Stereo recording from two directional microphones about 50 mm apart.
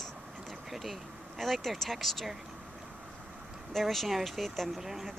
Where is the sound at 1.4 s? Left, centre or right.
Centre.